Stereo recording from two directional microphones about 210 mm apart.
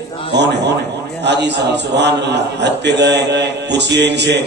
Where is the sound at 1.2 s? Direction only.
55° right (ahead or behind).